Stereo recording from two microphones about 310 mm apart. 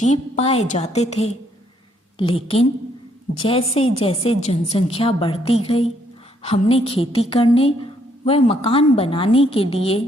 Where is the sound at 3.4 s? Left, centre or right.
Centre.